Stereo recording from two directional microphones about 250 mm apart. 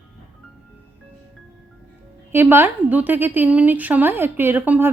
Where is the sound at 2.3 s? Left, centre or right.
Centre.